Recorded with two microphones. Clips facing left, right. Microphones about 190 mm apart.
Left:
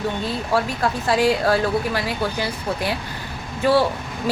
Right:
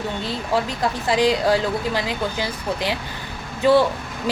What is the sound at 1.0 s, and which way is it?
A woman's voice, 15° right (ahead or behind).